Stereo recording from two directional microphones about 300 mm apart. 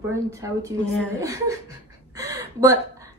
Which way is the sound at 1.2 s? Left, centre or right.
Centre.